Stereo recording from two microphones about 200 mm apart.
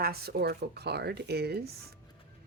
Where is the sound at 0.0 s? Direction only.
50° right (ahead or behind).